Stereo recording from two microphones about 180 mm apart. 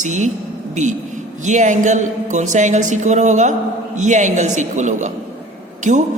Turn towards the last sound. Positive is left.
turn(degrees=-45)  # may be behind; listen again after turning